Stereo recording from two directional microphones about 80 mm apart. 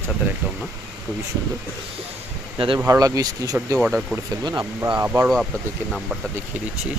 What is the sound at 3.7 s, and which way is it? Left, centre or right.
Speech, centre.